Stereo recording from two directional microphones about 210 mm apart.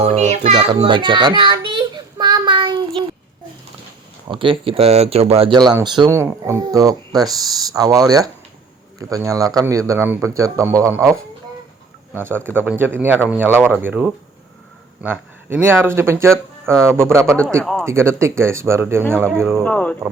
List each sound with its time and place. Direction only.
0.2 s child singing: 30° right (ahead or behind)
4.3 s speech: 25° right (ahead or behind)
17.6 s speech: centre (ahead or behind)
17.8 s speech: 10° right (ahead or behind)
19.6 s speech: 5° left (ahead or behind)